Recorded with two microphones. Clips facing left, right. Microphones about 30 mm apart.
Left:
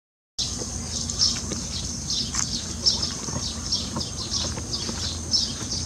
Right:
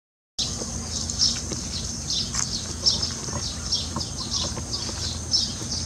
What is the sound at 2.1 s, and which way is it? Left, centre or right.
Horse, centre.